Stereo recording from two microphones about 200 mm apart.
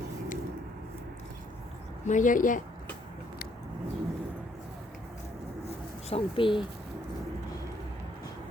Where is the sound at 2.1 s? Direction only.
40° left (ahead or behind).